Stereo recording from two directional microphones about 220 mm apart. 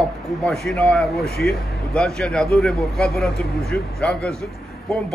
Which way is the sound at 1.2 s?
45° left (ahead or behind).